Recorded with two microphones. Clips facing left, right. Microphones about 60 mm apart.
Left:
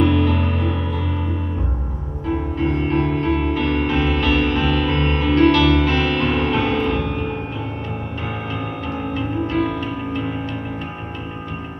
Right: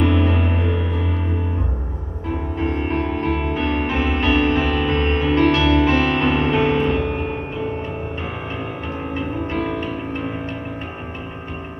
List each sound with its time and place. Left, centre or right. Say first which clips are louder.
0.0 s music: left 1 dB; right
2.9 s music: left 2 dB; centre